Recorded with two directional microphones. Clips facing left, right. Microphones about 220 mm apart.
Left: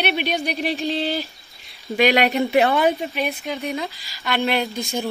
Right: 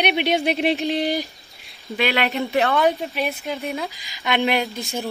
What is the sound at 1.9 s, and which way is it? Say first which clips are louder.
Speech: left 4 dB; 15° left (ahead or behind).